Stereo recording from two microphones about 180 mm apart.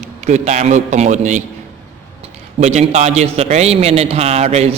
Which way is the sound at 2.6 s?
40° right (ahead or behind).